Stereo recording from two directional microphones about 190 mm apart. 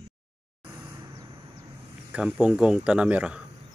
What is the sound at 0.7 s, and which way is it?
Vehicle, 15° right (ahead or behind).